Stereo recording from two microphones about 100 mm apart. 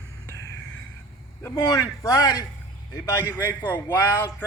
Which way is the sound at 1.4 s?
30° left (ahead or behind).